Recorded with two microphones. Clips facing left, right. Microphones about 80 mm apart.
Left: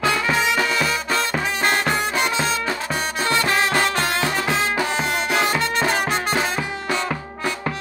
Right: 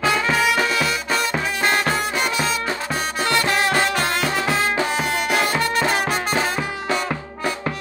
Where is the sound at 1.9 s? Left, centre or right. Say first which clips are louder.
Even; left.